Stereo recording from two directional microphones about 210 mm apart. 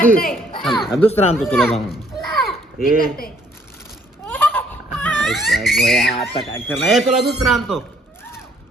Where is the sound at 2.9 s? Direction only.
45° left (ahead or behind).